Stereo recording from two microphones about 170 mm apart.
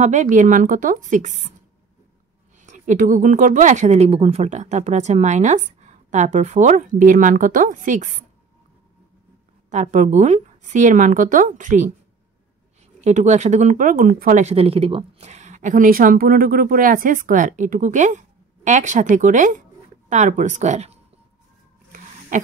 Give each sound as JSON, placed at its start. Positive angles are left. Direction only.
{"t": 0.0, "sound": "speech", "side_deg": -45}
{"t": 2.6, "sound": "speech", "side_deg": -45}
{"t": 9.7, "sound": "speech", "side_deg": -45}
{"t": 13.0, "sound": "speech", "side_deg": -40}
{"t": 22.3, "sound": "a sound", "side_deg": -50}